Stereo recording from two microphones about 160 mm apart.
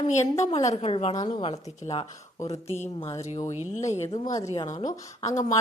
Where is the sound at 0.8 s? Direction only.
40° left (ahead or behind).